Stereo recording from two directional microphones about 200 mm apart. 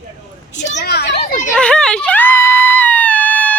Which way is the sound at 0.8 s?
55° left (ahead or behind).